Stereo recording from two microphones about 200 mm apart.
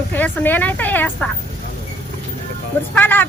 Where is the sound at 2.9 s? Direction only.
10° left (ahead or behind).